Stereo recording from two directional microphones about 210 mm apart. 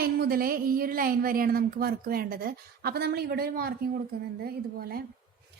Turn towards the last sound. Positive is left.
turn(degrees=-45)  # may be behind; listen again after turning